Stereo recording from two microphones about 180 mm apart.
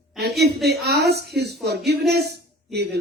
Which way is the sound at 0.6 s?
65° right (ahead or behind).